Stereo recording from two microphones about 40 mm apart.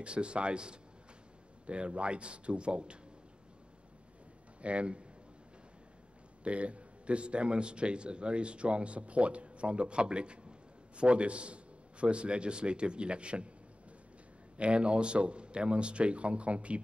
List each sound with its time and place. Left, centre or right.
0.0 s a man's voice: right
4.6 s a man's voice: right
6.4 s a man's voice: right
14.6 s a man's voice: right